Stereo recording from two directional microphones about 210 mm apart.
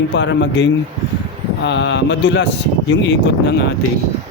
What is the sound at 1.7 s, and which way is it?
Speech, 60° left (ahead or behind).